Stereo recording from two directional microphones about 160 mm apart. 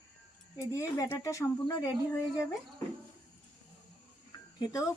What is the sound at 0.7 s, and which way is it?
Speech, 20° left (ahead or behind).